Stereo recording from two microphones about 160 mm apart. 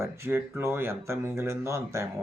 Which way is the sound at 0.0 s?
15° right (ahead or behind).